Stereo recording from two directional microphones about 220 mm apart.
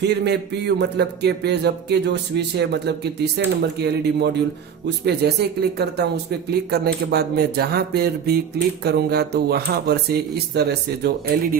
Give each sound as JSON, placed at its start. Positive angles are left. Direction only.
{"t": 0.0, "sound": "music", "side_deg": -50}